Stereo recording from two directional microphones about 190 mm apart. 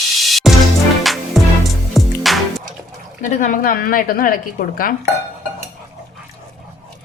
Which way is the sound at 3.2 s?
45° left (ahead or behind).